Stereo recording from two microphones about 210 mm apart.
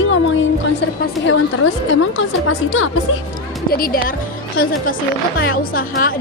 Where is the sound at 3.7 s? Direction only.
45° left (ahead or behind).